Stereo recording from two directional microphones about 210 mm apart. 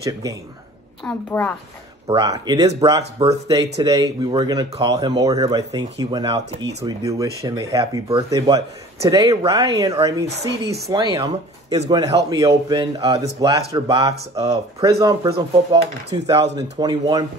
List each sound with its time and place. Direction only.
0.0 s speech: 15° right (ahead or behind)
1.0 s a woman's voice: 10° left (ahead or behind)
2.0 s speech: 20° right (ahead or behind)
3.0 s speech: 30° right (ahead or behind)
3.4 s speech: 20° right (ahead or behind)